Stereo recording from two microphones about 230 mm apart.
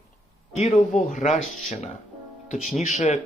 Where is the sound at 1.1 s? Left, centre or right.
Left.